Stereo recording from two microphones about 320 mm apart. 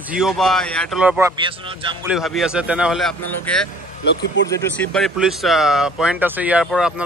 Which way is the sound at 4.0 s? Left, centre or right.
Left.